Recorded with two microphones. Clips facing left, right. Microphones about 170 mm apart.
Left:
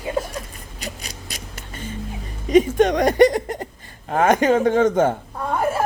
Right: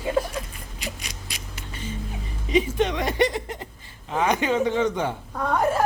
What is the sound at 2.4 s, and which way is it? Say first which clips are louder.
A woman's voice: left 7 dB; 45° left (ahead or behind).